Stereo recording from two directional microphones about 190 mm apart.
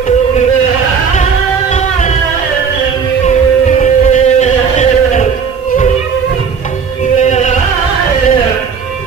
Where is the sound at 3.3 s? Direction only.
40° left (ahead or behind).